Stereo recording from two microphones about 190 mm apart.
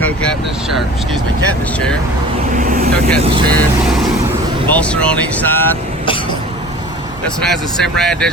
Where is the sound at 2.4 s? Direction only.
45° right (ahead or behind).